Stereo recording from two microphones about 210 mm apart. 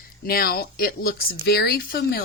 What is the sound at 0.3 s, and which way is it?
Speech, 45° left (ahead or behind).